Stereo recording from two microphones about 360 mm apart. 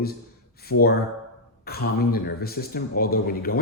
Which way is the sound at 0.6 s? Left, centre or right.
Left.